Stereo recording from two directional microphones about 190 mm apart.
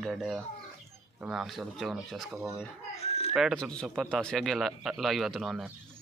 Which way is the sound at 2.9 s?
35° left (ahead or behind).